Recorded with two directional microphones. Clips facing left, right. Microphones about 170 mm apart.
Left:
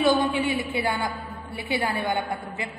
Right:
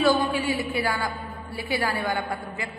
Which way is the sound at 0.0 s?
20° left (ahead or behind).